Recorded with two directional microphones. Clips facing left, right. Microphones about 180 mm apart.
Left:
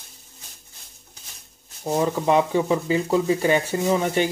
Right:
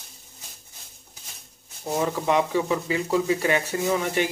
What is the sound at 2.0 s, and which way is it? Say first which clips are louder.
Speech: left 3 dB; 30° left (ahead or behind).